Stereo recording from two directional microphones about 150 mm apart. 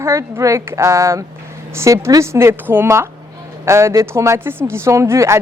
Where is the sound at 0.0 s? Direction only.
20° right (ahead or behind).